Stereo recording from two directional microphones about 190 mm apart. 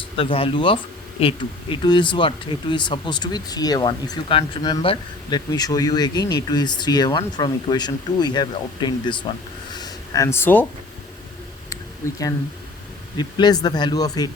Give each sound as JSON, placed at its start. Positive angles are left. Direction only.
{"t": 0.2, "sound": "speech", "side_deg": 30}
{"t": 9.7, "sound": "a sound", "side_deg": 20}
{"t": 12.0, "sound": "speech", "side_deg": 15}